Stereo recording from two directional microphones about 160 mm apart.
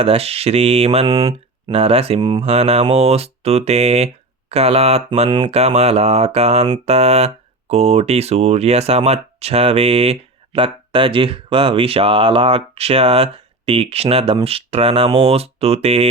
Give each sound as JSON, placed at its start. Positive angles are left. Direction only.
{"t": 0.0, "sound": "speech", "side_deg": -40}
{"t": 1.0, "sound": "speech", "side_deg": -25}
{"t": 1.7, "sound": "speech", "side_deg": -40}